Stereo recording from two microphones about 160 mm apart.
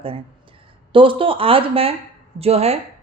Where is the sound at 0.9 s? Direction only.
35° right (ahead or behind).